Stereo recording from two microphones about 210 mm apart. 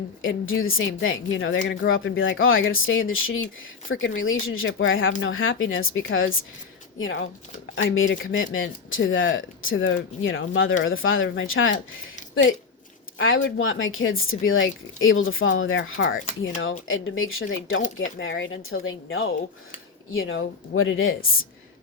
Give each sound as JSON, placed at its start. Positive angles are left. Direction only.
{"t": 0.2, "sound": "speech", "side_deg": 70}